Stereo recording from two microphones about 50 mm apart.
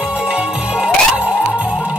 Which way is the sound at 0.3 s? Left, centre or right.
Centre.